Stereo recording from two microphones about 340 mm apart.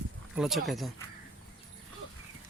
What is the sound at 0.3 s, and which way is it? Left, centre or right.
Speech, centre.